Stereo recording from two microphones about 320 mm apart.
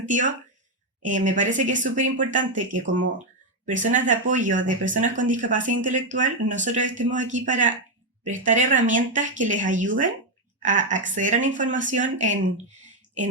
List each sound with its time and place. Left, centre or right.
0.1 s speech: right
2.8 s speech: right
3.8 s speech: right